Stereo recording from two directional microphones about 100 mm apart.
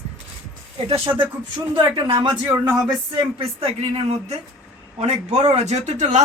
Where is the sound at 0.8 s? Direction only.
60° right (ahead or behind).